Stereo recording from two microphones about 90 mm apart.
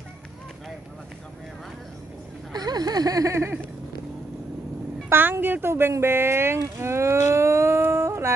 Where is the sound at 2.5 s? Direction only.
45° right (ahead or behind); by 3.6 s 30° right (ahead or behind).